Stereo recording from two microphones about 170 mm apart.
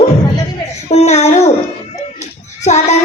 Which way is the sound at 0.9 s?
40° left (ahead or behind).